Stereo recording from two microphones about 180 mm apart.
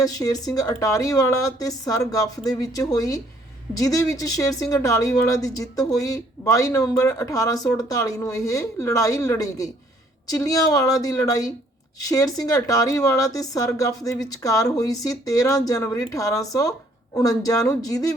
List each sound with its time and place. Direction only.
0.0 s speech: 20° left (ahead or behind)